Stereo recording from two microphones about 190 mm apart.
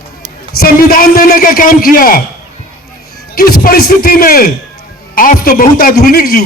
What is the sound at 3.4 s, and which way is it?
A man's voice, 50° left (ahead or behind).